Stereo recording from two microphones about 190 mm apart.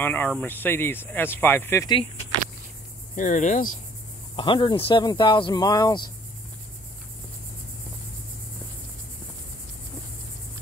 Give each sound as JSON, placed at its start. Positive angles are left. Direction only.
{"t": 0.0, "sound": "speech", "side_deg": 10}
{"t": 3.2, "sound": "speech", "side_deg": 40}
{"t": 4.4, "sound": "speech", "side_deg": 25}